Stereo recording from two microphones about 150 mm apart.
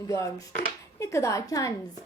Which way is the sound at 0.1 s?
20° left (ahead or behind).